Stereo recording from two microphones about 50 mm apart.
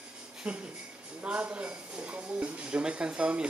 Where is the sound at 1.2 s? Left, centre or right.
Right.